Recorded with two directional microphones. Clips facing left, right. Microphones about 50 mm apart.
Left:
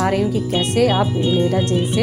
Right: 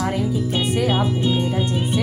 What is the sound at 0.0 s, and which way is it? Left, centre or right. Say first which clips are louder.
A woman's voice: left 4 dB; left.